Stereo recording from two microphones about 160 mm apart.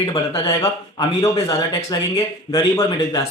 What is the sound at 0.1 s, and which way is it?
A man's voice, 25° left (ahead or behind).